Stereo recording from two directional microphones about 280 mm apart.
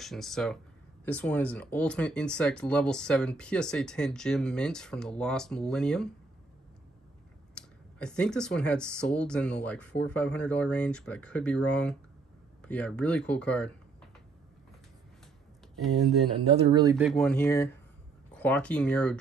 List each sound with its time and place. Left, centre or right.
0.0 s speech: centre
7.5 s speech: centre
15.8 s speech: centre
16.4 s speech: right
16.9 s speech: centre